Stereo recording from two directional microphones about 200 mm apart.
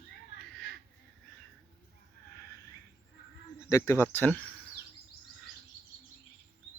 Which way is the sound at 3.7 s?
15° left (ahead or behind).